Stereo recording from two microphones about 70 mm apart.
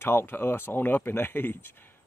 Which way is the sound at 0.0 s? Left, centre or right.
Left.